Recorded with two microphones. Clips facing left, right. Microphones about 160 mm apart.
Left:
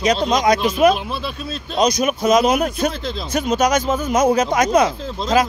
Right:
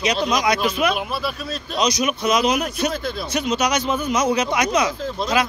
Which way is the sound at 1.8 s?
50° left (ahead or behind).